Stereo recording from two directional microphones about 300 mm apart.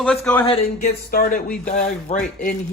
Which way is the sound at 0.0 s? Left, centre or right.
Centre.